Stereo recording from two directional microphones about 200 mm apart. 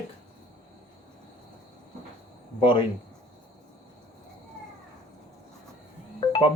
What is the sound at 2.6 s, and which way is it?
Speech, 25° left (ahead or behind).